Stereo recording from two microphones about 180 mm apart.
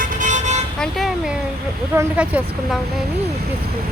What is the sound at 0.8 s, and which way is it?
Vehicle, centre (ahead or behind).